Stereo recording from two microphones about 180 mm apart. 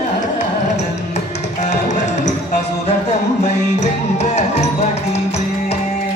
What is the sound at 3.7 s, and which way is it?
Music, 40° left (ahead or behind).